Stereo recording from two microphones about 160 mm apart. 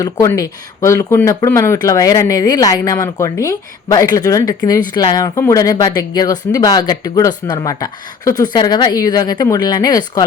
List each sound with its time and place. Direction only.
0.0 s speech: 20° left (ahead or behind)